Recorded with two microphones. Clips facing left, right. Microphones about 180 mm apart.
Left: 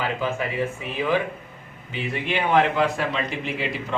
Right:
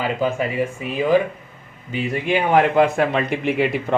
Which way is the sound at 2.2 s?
45° right (ahead or behind).